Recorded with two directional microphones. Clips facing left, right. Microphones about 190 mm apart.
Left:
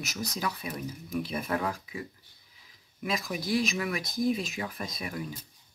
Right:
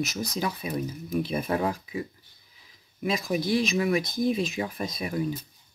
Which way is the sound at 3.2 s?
25° right (ahead or behind).